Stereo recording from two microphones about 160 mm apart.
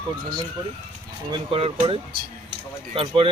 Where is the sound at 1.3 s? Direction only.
30° right (ahead or behind).